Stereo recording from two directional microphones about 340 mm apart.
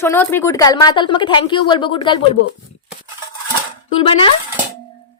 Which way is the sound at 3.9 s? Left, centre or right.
Centre.